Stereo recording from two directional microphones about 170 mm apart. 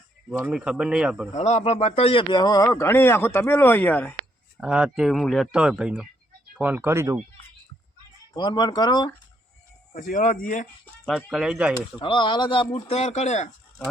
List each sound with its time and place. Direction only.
0.3 s speech: 10° right (ahead or behind)
1.3 s speech: 40° left (ahead or behind); by 4.1 s 10° left (ahead or behind)
4.6 s speech: 5° right (ahead or behind)
8.3 s speech: 25° left (ahead or behind)
9.9 s speech: 55° left (ahead or behind)
11.0 s speech: centre (ahead or behind)
11.9 s speech: 30° left (ahead or behind)